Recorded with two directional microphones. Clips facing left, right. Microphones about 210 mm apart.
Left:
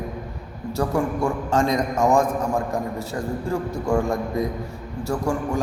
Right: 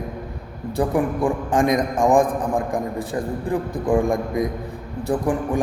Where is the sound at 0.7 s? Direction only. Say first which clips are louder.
Right 2 dB; 15° right (ahead or behind).